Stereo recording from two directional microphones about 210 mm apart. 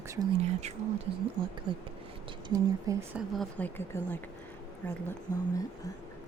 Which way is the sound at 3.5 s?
10° left (ahead or behind).